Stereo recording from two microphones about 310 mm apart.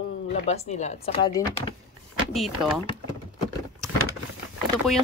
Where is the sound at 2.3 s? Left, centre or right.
Centre.